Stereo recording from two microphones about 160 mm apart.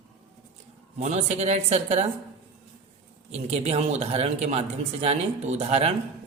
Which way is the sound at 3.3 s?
40° right (ahead or behind).